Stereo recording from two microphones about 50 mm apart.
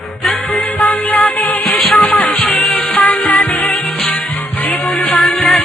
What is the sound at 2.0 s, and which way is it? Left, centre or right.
Music, centre.